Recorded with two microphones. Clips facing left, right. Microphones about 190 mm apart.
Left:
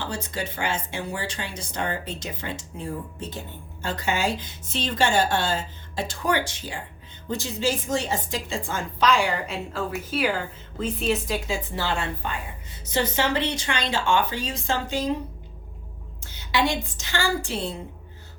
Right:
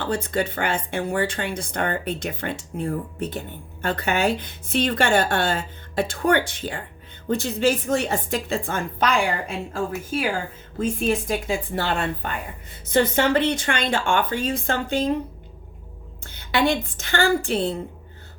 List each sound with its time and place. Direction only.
0.0 s speech: 55° right (ahead or behind)
16.2 s a woman's voice: 55° right (ahead or behind)